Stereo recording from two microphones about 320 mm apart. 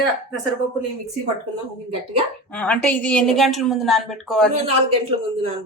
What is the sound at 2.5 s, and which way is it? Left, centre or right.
A woman's voice, centre.